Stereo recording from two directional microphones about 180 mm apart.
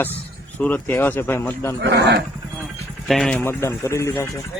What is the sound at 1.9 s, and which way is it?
Speech, 70° right (ahead or behind).